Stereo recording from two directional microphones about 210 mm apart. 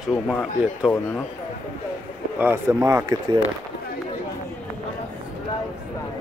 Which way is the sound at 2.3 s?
10° right (ahead or behind).